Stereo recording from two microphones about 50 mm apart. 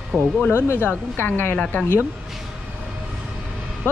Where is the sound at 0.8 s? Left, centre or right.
Left.